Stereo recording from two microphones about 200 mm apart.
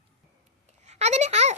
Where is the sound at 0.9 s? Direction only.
35° right (ahead or behind).